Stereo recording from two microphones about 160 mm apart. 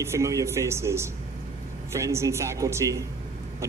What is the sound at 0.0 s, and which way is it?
A man's voice, 20° right (ahead or behind).